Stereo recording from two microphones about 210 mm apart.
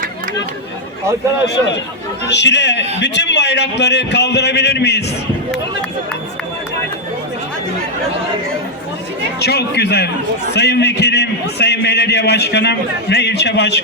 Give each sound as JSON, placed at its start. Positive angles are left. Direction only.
{"t": 2.2, "sound": "a man's voice", "side_deg": 55}
{"t": 9.4, "sound": "a man's voice", "side_deg": 50}